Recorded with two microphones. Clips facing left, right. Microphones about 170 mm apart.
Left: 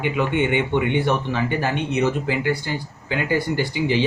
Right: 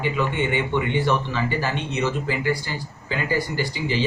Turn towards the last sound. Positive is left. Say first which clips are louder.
# left 4 dB
turn(degrees=55)  # may be behind; listen again after turning